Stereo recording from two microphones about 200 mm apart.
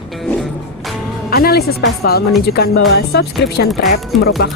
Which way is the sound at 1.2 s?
50° left (ahead or behind).